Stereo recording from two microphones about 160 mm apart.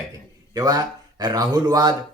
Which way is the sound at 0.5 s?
25° right (ahead or behind).